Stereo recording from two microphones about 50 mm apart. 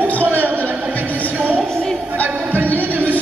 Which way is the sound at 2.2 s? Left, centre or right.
Right.